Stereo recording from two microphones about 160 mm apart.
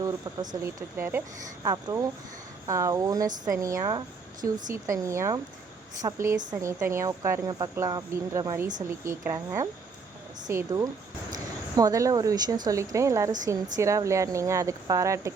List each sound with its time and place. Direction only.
0.0 s a woman's voice: 20° right (ahead or behind)